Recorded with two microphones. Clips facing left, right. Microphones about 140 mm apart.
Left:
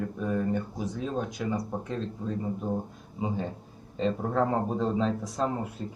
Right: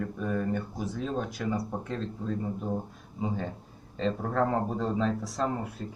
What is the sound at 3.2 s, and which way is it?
Speech, 15° left (ahead or behind).